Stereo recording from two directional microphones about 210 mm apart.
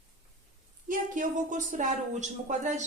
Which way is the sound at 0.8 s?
40° right (ahead or behind).